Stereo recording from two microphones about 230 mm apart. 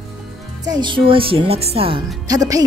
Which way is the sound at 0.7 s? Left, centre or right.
Centre.